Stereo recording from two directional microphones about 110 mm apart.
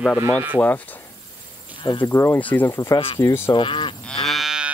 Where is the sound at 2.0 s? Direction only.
25° left (ahead or behind).